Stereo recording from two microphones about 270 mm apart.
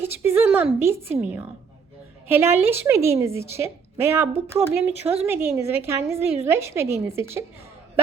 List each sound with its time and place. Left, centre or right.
0.0 s a woman's voice: centre